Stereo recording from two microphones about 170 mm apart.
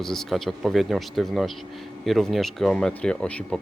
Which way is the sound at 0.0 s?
Centre (ahead or behind).